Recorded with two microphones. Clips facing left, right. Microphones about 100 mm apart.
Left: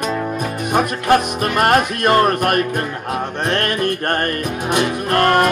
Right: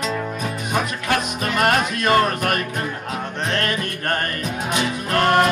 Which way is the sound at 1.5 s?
50° left (ahead or behind).